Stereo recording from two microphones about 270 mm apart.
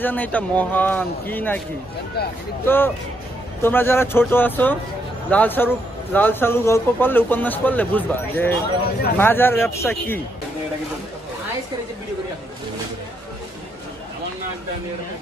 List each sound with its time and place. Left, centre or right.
0.0 s a man's voice: centre
2.2 s speech: left
2.6 s a man's voice: centre